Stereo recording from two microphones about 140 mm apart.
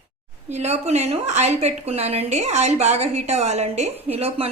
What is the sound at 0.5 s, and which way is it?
Speech, 50° right (ahead or behind).